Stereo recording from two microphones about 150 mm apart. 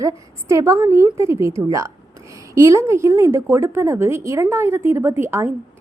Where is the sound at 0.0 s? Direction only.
20° right (ahead or behind).